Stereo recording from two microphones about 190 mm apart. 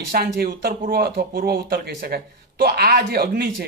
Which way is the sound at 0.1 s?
50° right (ahead or behind).